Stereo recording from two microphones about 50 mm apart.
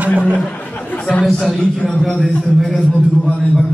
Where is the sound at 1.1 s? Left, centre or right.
Left.